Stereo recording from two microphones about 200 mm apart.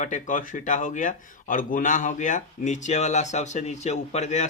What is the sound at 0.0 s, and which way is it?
Speech, 40° left (ahead or behind).